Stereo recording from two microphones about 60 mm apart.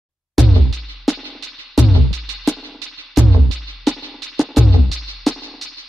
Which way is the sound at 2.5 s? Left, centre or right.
Left.